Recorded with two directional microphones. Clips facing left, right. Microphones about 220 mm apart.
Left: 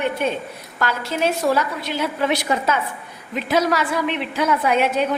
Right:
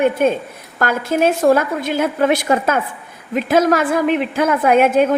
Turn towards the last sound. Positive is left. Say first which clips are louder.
# right 6 dB
turn(degrees=-50)  # may be behind; listen again after turning